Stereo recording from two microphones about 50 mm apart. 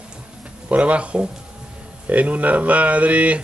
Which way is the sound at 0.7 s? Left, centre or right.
Right.